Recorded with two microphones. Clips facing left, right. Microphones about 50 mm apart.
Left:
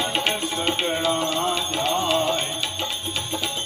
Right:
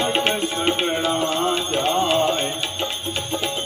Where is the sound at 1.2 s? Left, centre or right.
Right.